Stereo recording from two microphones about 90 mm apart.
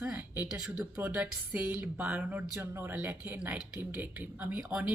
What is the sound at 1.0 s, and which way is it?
Speech, 20° right (ahead or behind).